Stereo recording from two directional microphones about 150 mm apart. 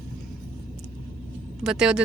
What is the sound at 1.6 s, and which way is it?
Speech, 5° right (ahead or behind).